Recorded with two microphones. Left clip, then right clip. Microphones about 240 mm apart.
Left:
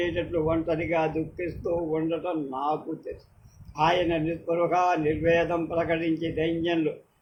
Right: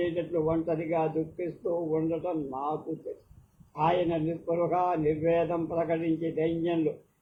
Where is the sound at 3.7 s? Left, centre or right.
Left.